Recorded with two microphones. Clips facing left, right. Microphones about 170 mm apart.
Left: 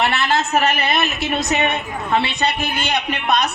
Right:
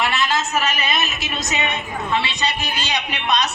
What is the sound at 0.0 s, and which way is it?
A woman's voice, 60° left (ahead or behind).